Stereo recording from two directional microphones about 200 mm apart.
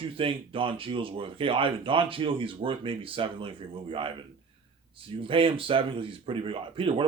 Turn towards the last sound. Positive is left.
turn(degrees=-25)  # may be behind; listen again after turning